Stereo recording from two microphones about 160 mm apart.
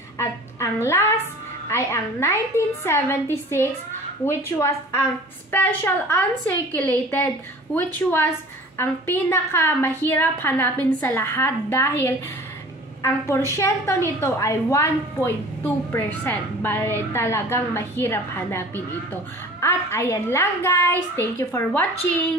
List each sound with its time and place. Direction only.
1.7 s a woman's voice: 15° left (ahead or behind)
19.6 s a woman's voice: 15° left (ahead or behind)